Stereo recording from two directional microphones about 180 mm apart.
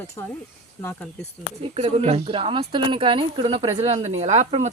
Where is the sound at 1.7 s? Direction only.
35° right (ahead or behind).